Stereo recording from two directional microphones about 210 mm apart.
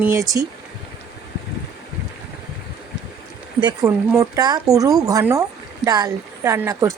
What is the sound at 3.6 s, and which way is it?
Speech, 20° right (ahead or behind).